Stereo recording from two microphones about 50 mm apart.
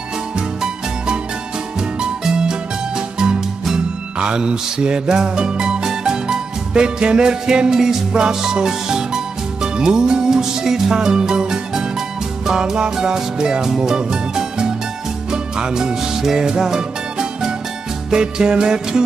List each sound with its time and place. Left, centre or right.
0.4 s music: centre